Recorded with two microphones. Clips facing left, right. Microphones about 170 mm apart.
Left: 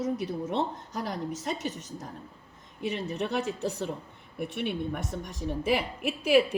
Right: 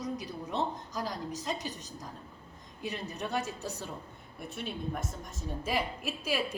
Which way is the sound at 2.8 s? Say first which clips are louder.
Left 6 dB; 65° left (ahead or behind).